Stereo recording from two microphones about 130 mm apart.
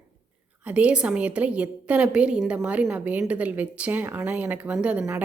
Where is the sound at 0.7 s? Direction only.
10° right (ahead or behind).